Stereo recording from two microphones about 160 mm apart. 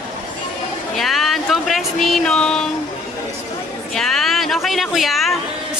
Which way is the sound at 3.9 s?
Centre (ahead or behind).